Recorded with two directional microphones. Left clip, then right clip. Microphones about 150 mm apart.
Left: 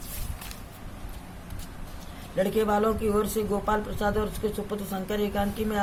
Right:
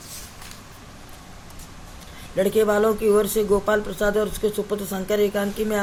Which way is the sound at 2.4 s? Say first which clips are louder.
Right 5 dB; 50° right (ahead or behind).